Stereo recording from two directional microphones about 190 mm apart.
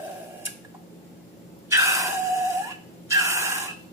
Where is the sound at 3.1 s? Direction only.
15° right (ahead or behind).